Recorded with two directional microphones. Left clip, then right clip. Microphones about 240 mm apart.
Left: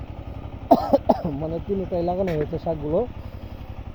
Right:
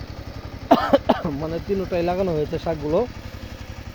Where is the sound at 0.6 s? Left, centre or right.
Right.